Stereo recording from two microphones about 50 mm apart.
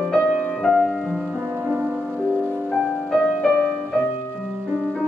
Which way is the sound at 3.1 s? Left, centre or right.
Left.